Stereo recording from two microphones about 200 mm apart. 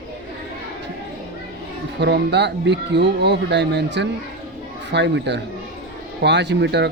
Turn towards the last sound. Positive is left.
turn(degrees=-60)  # may be behind; listen again after turning